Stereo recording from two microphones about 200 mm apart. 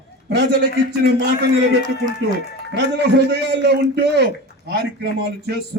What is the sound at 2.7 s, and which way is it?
A man's voice, 60° right (ahead or behind).